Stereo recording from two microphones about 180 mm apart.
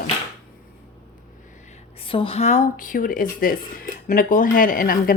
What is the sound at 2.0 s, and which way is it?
Speech, 30° left (ahead or behind).